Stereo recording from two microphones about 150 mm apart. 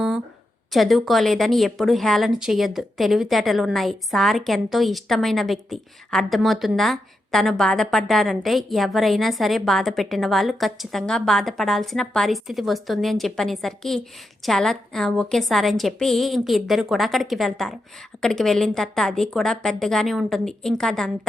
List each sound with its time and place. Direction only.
0.7 s a woman's voice: centre (ahead or behind)